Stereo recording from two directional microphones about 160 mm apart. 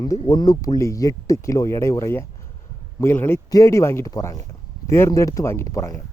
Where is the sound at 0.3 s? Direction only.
25° left (ahead or behind).